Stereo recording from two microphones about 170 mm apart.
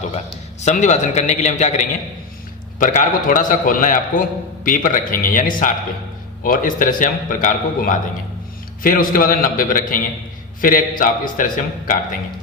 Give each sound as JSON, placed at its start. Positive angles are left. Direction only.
{"t": 0.6, "sound": "a man's voice", "side_deg": 45}